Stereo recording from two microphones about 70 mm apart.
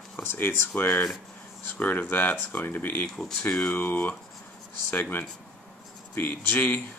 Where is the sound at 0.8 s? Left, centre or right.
Centre.